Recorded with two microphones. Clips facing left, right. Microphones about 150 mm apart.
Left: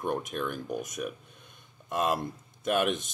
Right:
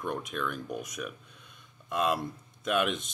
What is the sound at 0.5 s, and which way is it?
Speech, centre (ahead or behind).